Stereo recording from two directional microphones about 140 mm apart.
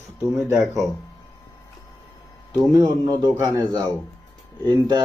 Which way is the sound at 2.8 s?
25° right (ahead or behind).